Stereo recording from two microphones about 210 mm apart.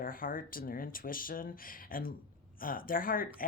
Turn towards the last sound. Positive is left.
turn(degrees=40)  # may be behind; listen again after turning